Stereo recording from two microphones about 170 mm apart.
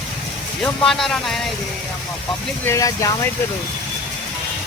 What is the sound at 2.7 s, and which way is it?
Speech, 20° left (ahead or behind).